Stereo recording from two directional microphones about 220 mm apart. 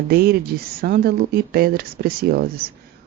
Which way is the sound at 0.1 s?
45° right (ahead or behind).